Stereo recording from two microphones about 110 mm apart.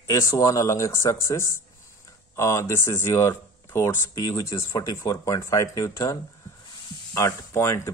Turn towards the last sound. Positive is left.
turn(degrees=25)  # may be behind; listen again after turning